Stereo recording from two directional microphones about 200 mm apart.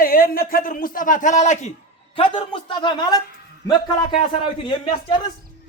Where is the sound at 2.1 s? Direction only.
25° left (ahead or behind).